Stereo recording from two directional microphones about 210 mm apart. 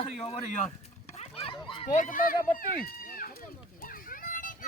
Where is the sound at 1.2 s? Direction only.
25° left (ahead or behind); by 3.3 s 45° left (ahead or behind).